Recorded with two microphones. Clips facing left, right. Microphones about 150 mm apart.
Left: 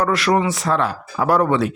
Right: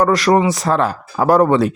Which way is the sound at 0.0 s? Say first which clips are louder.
Right 4 dB; 40° right (ahead or behind).